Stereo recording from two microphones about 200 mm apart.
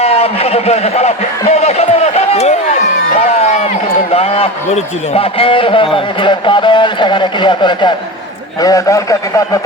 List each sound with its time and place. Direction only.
0.0 s speech: 30° left (ahead or behind)
3.1 s a sound: 35° left (ahead or behind)
4.1 s a man's voice: 30° left (ahead or behind)